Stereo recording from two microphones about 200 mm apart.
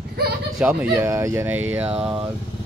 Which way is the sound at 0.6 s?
10° right (ahead or behind).